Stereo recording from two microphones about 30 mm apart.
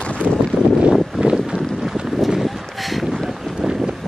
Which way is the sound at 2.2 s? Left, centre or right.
Centre.